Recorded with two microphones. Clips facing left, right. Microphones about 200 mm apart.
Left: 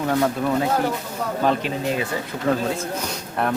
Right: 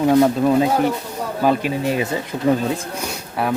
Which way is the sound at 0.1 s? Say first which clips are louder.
Right 6 dB; 20° right (ahead or behind).